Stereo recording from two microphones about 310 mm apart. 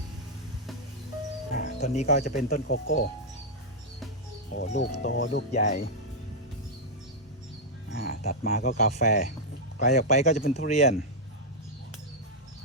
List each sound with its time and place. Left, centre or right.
1.5 s speech: left
4.5 s speech: left
5.5 s speech: left
7.9 s speech: left